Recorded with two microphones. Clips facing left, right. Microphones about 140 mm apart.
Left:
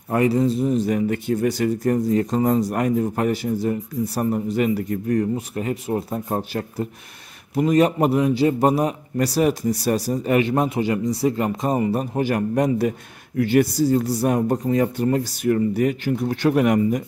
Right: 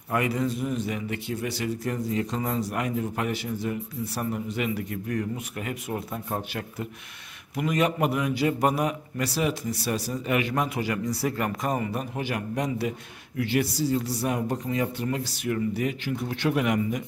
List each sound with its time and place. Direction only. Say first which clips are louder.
0.1 s speech: left 7 dB; 35° left (ahead or behind)